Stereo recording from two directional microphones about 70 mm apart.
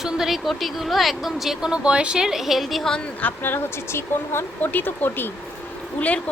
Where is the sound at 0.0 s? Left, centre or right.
Centre.